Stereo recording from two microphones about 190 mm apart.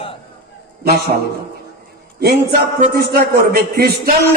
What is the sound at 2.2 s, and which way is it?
A man's voice, 55° right (ahead or behind).